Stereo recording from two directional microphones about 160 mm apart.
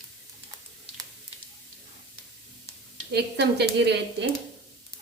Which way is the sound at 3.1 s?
90° right.